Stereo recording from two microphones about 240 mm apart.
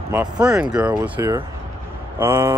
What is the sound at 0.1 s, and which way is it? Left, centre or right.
Speech, centre.